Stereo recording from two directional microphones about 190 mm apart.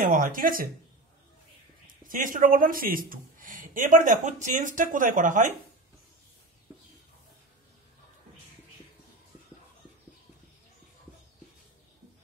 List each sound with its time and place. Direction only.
0.0 s speech: 45° right (ahead or behind)
2.0 s speech: 45° right (ahead or behind)